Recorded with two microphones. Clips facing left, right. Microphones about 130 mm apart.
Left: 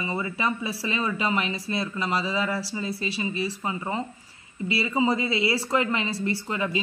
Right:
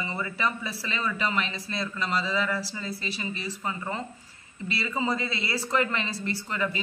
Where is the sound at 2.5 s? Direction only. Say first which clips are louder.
Left 2 dB; 30° left (ahead or behind).